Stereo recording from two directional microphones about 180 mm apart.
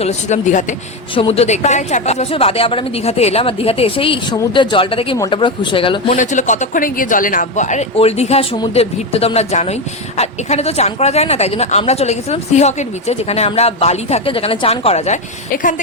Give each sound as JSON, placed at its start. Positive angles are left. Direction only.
{"t": 0.0, "sound": "speech", "side_deg": 40}
{"t": 6.1, "sound": "speech", "side_deg": 45}